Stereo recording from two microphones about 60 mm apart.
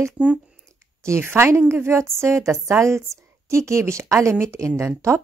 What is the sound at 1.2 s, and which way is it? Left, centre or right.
A woman's voice, right.